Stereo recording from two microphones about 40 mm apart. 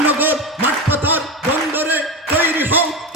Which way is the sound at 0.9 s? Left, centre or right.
Right.